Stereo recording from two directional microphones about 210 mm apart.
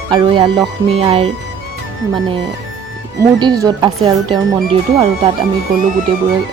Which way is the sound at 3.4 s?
20° right (ahead or behind).